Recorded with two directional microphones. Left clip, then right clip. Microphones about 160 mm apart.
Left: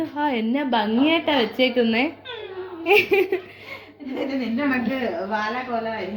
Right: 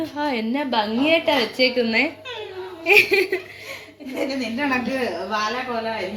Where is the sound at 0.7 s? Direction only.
15° left (ahead or behind).